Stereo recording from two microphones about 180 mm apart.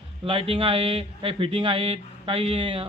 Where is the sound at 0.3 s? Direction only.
30° right (ahead or behind).